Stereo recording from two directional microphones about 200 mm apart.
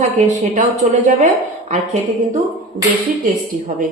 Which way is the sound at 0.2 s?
35° right (ahead or behind).